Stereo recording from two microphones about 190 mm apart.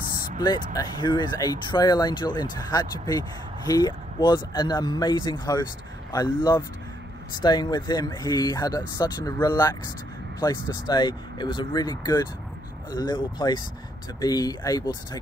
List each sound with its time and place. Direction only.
0.7 s speech: 25° left (ahead or behind)